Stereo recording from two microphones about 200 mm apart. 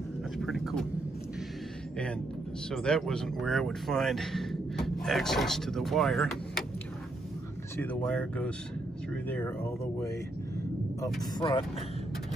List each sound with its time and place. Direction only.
0.4 s a sound: centre (ahead or behind)
2.7 s speech: centre (ahead or behind)
7.7 s speech: 10° left (ahead or behind)
11.3 s speech: 25° left (ahead or behind)